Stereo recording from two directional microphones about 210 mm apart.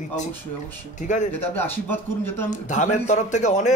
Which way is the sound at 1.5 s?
10° left (ahead or behind).